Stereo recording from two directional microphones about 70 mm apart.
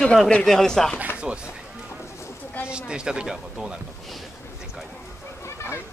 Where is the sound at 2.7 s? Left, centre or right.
Centre.